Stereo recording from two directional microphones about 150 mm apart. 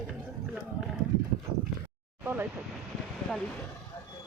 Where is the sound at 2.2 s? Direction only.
15° right (ahead or behind).